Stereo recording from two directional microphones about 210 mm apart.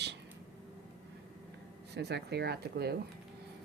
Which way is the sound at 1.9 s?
55° right (ahead or behind).